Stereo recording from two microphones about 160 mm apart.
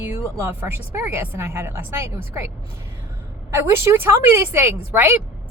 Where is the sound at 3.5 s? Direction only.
15° right (ahead or behind).